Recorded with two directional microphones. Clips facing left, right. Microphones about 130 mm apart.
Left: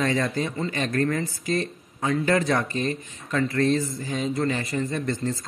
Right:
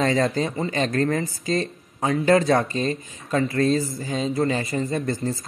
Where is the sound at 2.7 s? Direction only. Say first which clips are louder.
Right 2 dB; 25° right (ahead or behind).